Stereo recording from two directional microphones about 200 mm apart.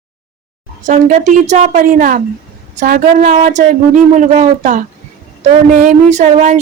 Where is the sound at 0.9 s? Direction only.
35° right (ahead or behind).